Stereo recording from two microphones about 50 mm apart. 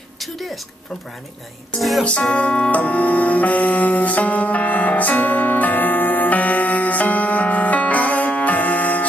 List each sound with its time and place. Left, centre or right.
1.8 s music: centre
2.0 s music: left